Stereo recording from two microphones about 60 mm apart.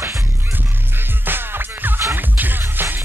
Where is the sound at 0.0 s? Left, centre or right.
Right.